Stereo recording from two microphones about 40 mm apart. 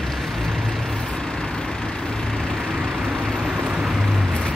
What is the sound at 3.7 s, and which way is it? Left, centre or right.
Boat, centre.